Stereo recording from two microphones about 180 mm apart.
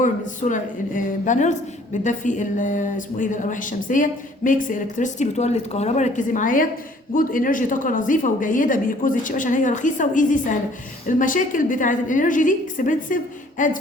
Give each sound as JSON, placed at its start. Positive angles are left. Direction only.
{"t": 0.0, "sound": "a woman's voice", "side_deg": 45}